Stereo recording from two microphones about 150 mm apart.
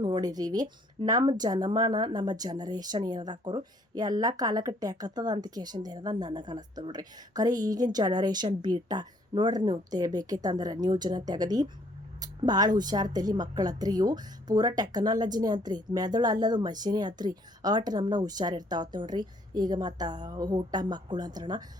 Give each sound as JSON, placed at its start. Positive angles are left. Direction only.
{"t": 0.0, "sound": "a woman's voice", "side_deg": -25}